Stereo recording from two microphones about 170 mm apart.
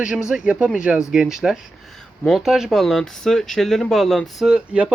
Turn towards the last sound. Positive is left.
turn(degrees=-5)  # may be behind; listen again after turning